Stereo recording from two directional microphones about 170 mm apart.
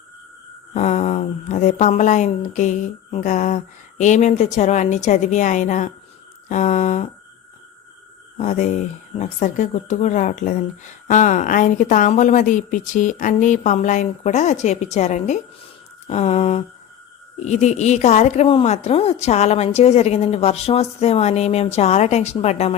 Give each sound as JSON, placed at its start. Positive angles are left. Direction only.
{"t": 0.7, "sound": "speech", "side_deg": 40}
{"t": 8.4, "sound": "speech", "side_deg": 45}